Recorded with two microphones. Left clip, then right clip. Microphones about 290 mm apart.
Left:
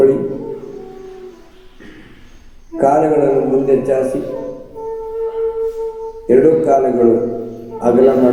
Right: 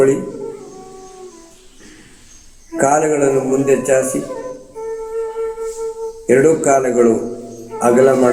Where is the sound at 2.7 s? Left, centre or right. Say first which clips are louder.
Left 2 dB; right.